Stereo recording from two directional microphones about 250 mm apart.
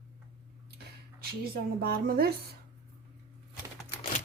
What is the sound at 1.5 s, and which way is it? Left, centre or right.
Speech, right.